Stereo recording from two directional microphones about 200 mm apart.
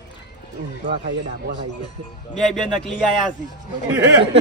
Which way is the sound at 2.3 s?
Centre (ahead or behind).